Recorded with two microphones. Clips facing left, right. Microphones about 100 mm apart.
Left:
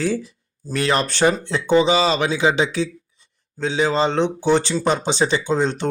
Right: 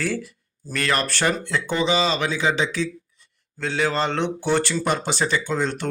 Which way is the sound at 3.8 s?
20° left (ahead or behind).